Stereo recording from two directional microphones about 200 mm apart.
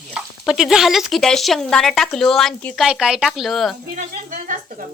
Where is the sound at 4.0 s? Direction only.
40° right (ahead or behind).